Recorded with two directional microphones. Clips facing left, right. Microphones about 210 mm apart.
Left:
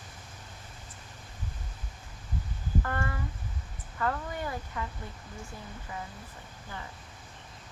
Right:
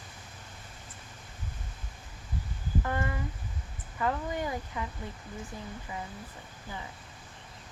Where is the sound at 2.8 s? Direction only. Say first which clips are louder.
Right 3 dB; 15° right (ahead or behind).